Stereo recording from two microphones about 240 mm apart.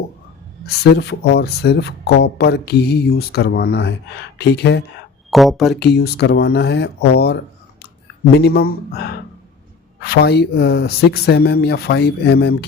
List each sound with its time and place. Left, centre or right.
0.9 s speech: left
5.3 s speech: centre
5.8 s speech: left